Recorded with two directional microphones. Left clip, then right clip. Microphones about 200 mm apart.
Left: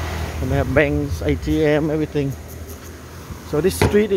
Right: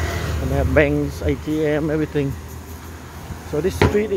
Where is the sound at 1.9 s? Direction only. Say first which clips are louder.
Even; 5° left (ahead or behind).